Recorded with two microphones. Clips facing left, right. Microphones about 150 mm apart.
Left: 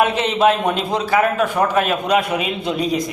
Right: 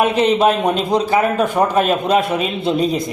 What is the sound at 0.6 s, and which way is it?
A man's voice, 20° right (ahead or behind).